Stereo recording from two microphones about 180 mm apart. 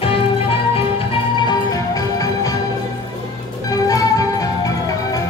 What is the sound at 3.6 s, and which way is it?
Music, 20° left (ahead or behind).